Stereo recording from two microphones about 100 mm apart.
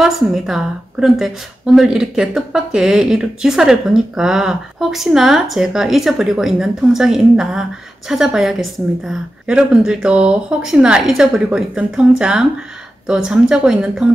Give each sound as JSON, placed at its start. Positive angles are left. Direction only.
{"t": 0.0, "sound": "speech", "side_deg": -5}